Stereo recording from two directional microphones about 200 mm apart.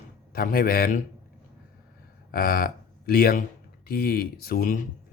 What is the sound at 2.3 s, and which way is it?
Speech, 50° left (ahead or behind).